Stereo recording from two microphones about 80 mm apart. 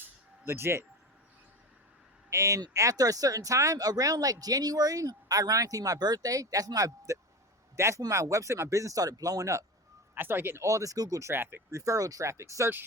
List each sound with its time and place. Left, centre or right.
0.4 s speech: right
2.3 s speech: right
10.2 s speech: right
11.8 s speech: right